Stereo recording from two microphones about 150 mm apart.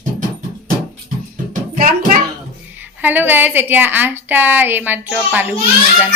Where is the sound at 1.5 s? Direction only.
65° right (ahead or behind).